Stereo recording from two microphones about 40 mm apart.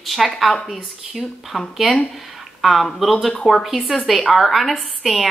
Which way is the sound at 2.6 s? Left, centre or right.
Centre.